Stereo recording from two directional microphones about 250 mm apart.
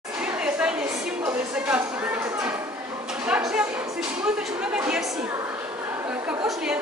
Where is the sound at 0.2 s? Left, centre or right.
Centre.